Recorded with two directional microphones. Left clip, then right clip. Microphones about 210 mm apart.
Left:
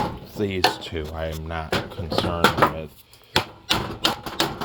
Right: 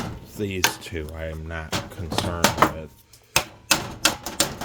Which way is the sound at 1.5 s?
5° left (ahead or behind).